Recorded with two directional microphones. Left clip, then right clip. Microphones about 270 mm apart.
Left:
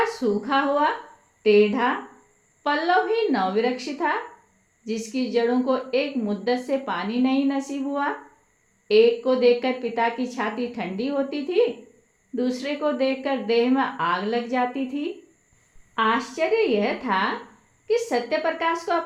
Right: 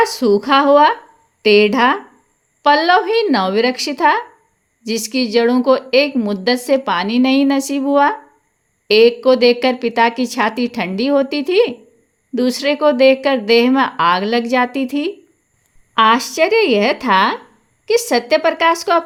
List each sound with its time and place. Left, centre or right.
0.0 s a woman's voice: right